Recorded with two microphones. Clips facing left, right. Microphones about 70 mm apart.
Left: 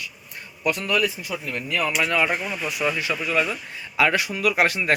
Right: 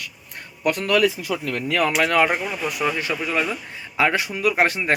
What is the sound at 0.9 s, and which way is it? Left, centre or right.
Speech, right.